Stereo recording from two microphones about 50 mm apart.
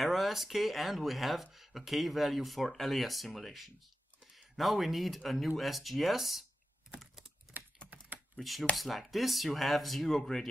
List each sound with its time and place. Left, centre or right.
0.0 s speech: centre
7.5 s typing: right
8.4 s speech: centre